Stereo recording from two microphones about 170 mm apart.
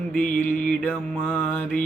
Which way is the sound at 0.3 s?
50° left (ahead or behind).